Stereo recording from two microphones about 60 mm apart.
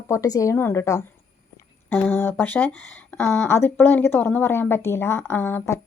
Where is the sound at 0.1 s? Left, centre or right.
Left.